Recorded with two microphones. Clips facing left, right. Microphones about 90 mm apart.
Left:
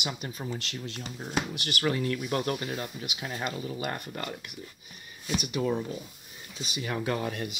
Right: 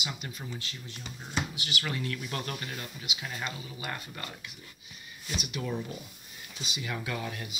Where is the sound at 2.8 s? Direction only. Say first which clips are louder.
Left 4 dB; 35° left (ahead or behind); by 4.1 s 55° left (ahead or behind).